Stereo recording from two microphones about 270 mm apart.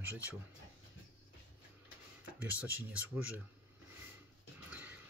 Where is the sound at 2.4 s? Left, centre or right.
Centre.